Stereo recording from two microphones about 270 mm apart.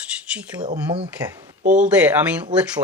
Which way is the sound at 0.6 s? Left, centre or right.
Centre.